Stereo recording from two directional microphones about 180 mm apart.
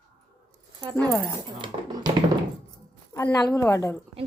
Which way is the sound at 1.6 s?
25° right (ahead or behind).